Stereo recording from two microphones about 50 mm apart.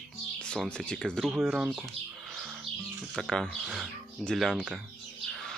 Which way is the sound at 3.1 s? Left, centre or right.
Centre.